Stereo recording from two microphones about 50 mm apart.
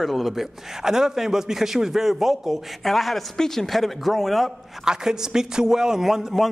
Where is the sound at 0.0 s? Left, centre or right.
Centre.